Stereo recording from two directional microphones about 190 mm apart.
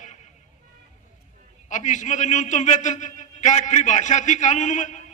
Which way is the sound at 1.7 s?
40° left (ahead or behind).